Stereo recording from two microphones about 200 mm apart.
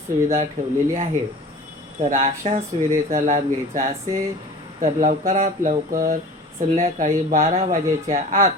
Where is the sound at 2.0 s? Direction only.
40° right (ahead or behind).